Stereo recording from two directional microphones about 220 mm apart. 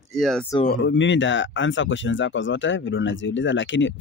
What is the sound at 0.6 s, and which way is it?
Speech, 50° left (ahead or behind).